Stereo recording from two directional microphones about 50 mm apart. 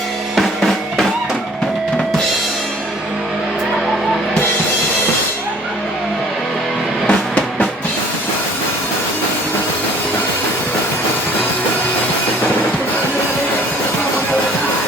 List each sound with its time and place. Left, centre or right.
7.1 s music: left